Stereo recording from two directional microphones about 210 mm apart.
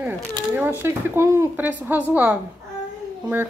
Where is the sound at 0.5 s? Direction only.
10° right (ahead or behind).